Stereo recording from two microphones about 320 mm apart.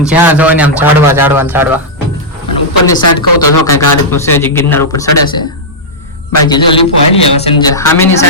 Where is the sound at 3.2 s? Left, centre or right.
Left.